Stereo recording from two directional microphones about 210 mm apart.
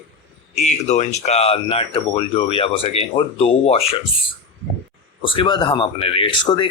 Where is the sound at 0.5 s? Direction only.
35° left (ahead or behind).